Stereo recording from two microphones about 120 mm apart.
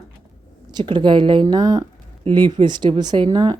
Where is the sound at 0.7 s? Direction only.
40° right (ahead or behind).